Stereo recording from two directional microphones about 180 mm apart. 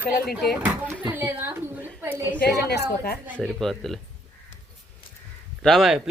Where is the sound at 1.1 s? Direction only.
10° right (ahead or behind).